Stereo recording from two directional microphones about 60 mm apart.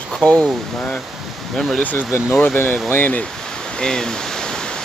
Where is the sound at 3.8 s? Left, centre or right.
Centre.